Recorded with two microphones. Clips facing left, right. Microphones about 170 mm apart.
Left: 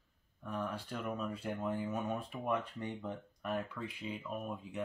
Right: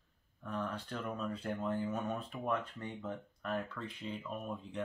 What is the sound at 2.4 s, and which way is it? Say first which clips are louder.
Speech: left 1 dB; 15° left (ahead or behind).